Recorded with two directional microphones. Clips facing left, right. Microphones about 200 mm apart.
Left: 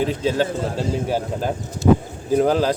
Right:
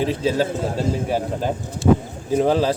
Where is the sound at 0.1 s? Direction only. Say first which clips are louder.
Right 1 dB; 35° right (ahead or behind).